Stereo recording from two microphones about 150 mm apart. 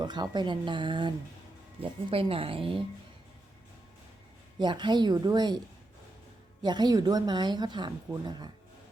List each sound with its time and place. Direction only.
0.0 s speech: 30° right (ahead or behind)
4.6 s a woman's voice: 30° right (ahead or behind)
6.6 s a woman's voice: 30° right (ahead or behind)